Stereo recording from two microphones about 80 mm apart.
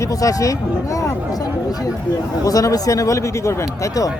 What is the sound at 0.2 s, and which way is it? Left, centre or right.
Speech, left.